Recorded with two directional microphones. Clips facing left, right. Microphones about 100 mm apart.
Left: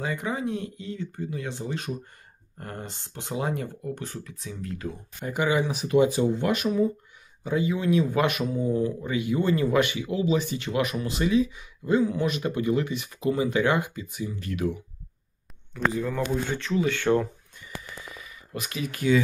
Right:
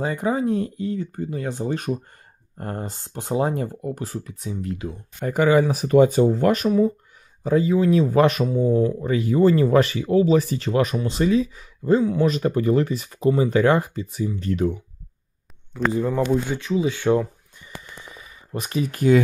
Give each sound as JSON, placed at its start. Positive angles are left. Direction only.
{"t": 0.0, "sound": "speech", "side_deg": -35}
{"t": 2.5, "sound": "speech", "side_deg": -35}
{"t": 4.8, "sound": "speech", "side_deg": -15}
{"t": 5.2, "sound": "speech", "side_deg": -45}
{"t": 16.2, "sound": "speech", "side_deg": -15}
{"t": 18.2, "sound": "speech", "side_deg": -35}